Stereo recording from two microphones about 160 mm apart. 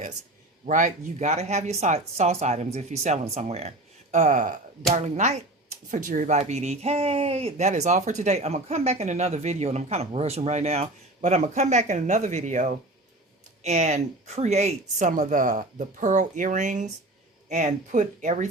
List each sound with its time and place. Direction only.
0.6 s speech: 50° right (ahead or behind)
5.9 s speech: 55° right (ahead or behind)